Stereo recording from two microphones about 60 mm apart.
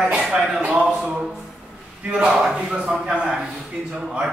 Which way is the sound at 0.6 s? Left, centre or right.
Right.